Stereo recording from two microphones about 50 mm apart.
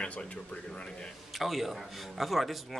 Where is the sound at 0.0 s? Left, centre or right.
Left.